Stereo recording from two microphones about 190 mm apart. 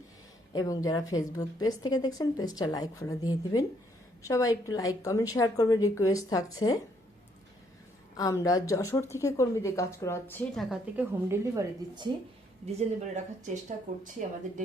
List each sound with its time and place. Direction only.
0.5 s a woman's voice: 20° left (ahead or behind)
8.1 s a woman's voice: 20° left (ahead or behind)
10.6 s a woman's voice: centre (ahead or behind)
11.3 s speech: 20° right (ahead or behind)
13.5 s speech: 40° right (ahead or behind)